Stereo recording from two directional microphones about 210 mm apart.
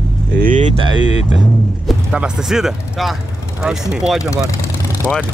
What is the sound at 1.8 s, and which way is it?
Speech, 5° right (ahead or behind).